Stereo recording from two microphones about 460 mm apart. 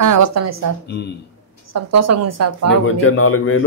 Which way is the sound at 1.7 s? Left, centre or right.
Right.